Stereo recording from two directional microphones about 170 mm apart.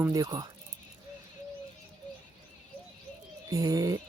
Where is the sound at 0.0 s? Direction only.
20° right (ahead or behind).